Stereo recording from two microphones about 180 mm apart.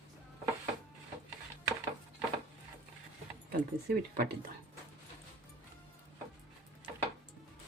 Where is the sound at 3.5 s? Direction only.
60° right (ahead or behind).